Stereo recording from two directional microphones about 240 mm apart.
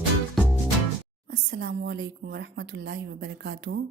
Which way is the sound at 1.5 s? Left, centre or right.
Right.